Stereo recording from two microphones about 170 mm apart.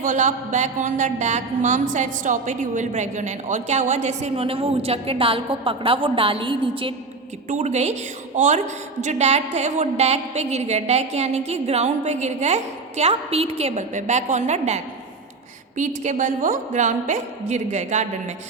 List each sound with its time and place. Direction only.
0.0 s a woman's voice: 45° right (ahead or behind); by 6.9 s 30° right (ahead or behind)
7.5 s a woman's voice: 40° right (ahead or behind)
16.0 s a woman's voice: 45° right (ahead or behind)